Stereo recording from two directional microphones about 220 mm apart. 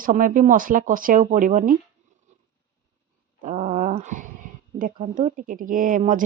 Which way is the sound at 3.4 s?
30° right (ahead or behind).